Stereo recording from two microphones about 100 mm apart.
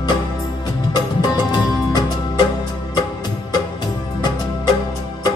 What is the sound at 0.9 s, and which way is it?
Music, 45° left (ahead or behind).